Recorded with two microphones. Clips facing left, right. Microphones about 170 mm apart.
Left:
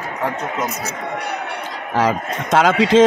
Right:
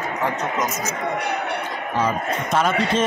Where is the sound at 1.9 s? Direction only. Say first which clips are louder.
Left 4 dB; 90° left.